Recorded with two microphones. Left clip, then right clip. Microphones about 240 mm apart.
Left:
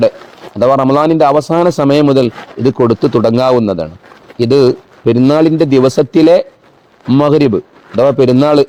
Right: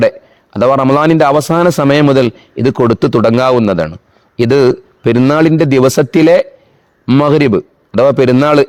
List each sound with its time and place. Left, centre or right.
0.5 s a man's voice: right